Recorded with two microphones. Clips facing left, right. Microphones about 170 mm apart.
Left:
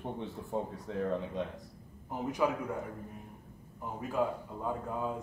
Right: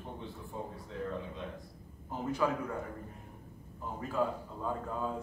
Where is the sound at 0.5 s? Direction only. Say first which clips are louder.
Left 7 dB; 70° left (ahead or behind).